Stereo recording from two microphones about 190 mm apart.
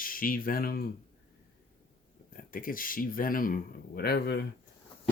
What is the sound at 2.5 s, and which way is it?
Speech, 45° left (ahead or behind).